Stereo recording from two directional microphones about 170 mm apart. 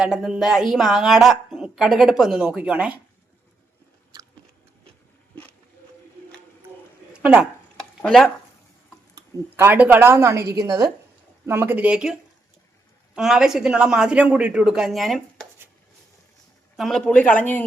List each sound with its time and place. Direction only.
0.0 s a woman's voice: 5° right (ahead or behind)
7.1 s a sound: 5° right (ahead or behind)
8.0 s a woman's voice: centre (ahead or behind)
9.1 s a woman's voice: 15° right (ahead or behind)
13.1 s a woman's voice: 5° right (ahead or behind)
16.7 s speech: centre (ahead or behind)